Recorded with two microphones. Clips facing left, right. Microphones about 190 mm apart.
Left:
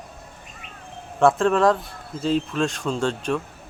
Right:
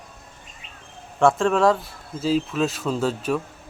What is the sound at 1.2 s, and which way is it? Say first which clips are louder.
Speech: even; centre (ahead or behind).